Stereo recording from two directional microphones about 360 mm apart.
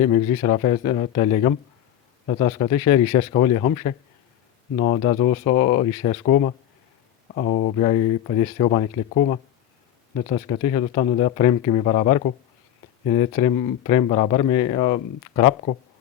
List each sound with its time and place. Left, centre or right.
0.0 s speech: centre